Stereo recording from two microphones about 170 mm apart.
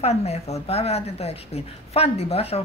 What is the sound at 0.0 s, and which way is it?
A woman's voice, 40° left (ahead or behind).